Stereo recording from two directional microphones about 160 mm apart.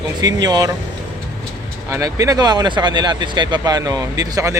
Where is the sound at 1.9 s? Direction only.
20° right (ahead or behind).